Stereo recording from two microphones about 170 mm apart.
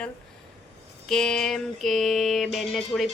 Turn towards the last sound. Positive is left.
turn(degrees=0)  # may be behind; listen again after turning